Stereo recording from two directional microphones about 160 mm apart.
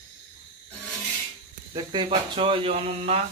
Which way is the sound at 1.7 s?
30° right (ahead or behind).